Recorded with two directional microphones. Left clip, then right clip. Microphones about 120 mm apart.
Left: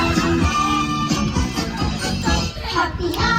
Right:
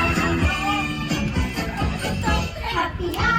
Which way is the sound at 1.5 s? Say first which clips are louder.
Left 2 dB; 50° left (ahead or behind).